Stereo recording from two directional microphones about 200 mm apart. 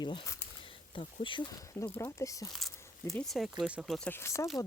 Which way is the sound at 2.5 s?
Centre (ahead or behind).